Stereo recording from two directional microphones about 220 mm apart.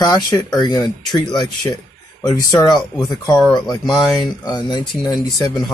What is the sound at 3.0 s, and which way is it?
Speech, 15° left (ahead or behind).